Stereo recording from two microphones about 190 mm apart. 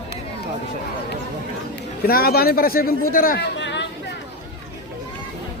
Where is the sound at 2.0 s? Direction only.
50° left (ahead or behind).